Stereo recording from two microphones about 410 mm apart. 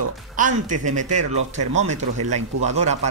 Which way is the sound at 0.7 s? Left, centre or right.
Right.